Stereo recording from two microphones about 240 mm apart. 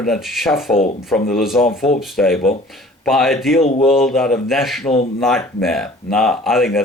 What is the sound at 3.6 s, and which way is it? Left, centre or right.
Speech, left.